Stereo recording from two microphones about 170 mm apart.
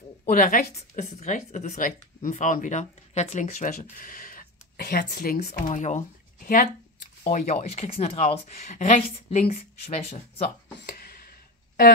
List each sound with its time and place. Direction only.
0.2 s a woman's voice: 55° left (ahead or behind)
5.7 s speech: 45° left (ahead or behind)
10.9 s a sound: 60° left (ahead or behind)